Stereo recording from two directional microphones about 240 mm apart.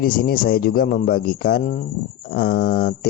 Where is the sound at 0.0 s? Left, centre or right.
Left.